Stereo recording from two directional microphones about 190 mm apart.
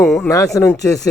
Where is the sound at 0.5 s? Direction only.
15° left (ahead or behind).